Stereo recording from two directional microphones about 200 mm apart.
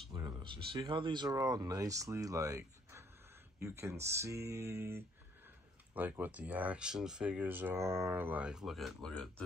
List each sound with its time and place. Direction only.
0.1 s speech: 20° right (ahead or behind); by 9.3 s centre (ahead or behind)